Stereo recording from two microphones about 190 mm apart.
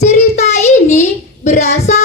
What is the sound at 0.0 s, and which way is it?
Child singing, 35° left (ahead or behind).